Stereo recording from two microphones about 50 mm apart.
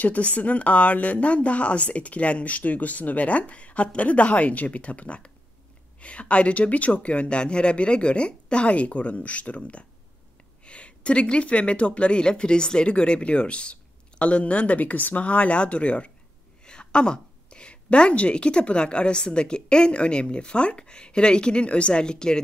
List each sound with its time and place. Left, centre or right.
0.0 s a woman's voice: left